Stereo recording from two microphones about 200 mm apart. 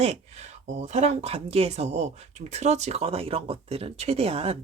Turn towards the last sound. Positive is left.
turn(degrees=-30)  # may be behind; listen again after turning